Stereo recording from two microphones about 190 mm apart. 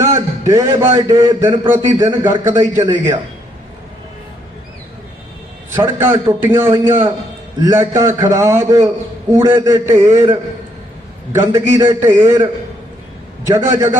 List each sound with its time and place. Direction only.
0.0 s a sound: 15° right (ahead or behind)
0.9 s a man's voice: 15° right (ahead or behind)
5.7 s a man's voice: 15° right (ahead or behind)
13.5 s a man's voice: 15° right (ahead or behind)